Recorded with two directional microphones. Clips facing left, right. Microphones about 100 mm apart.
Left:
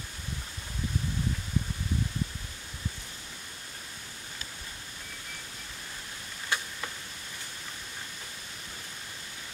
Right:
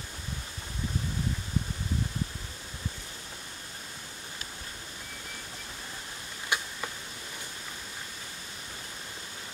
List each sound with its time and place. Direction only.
6.5 s tick-tock: 15° right (ahead or behind)